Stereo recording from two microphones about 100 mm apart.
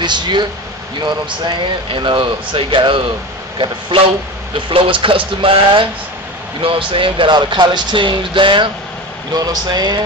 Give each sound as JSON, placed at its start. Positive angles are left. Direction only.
{"t": 0.0, "sound": "speech", "side_deg": -50}
{"t": 9.3, "sound": "speech", "side_deg": -40}